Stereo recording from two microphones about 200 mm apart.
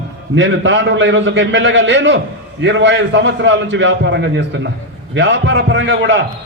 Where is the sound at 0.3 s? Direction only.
65° right (ahead or behind).